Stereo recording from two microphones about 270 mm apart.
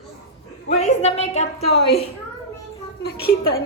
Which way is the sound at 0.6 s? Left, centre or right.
Left.